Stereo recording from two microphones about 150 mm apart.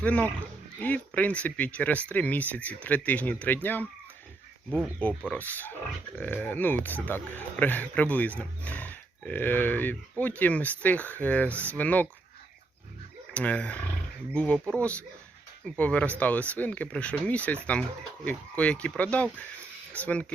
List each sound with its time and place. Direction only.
0.0 s speech: 10° left (ahead or behind)
5.3 s speech: 10° left (ahead or behind)
13.3 s speech: 10° left (ahead or behind)